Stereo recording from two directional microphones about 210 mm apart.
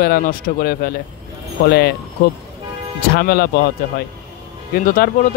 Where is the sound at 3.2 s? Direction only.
45° left (ahead or behind).